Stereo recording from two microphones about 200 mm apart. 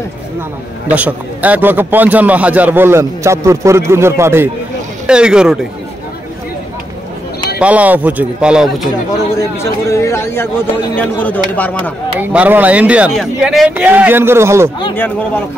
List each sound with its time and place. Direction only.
0.9 s a man's voice: 5° right (ahead or behind)
7.5 s a man's voice: 5° right (ahead or behind)
9.4 s speech: 15° left (ahead or behind)
12.2 s a man's voice: 10° right (ahead or behind)